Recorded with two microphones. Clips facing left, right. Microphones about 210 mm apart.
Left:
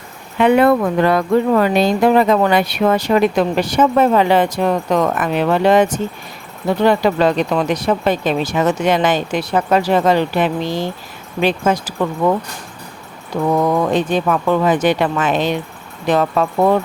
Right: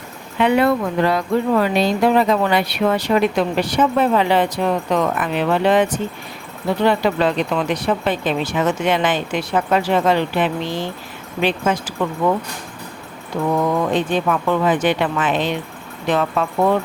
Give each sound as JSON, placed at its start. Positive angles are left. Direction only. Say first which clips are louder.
{"t": 0.3, "sound": "speech", "louder": "left 4 dB", "side_deg": 50}
{"t": 13.3, "sound": "speech", "louder": "left 3 dB", "side_deg": 45}